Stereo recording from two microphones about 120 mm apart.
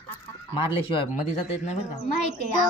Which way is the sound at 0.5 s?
45° left (ahead or behind).